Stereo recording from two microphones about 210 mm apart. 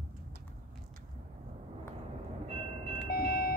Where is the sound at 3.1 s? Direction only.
45° left (ahead or behind).